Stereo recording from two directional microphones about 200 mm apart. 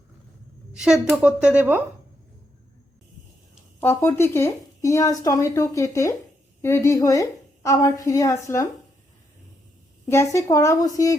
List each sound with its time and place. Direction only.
0.7 s a woman's voice: 5° right (ahead or behind)
3.8 s speech: 10° left (ahead or behind)
10.1 s speech: 15° left (ahead or behind)